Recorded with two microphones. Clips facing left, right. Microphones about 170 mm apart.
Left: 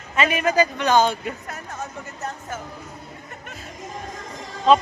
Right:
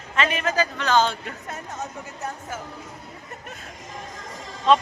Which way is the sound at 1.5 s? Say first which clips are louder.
Even; 25° right (ahead or behind).